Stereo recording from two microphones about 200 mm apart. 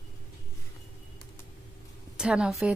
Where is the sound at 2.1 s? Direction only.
5° right (ahead or behind).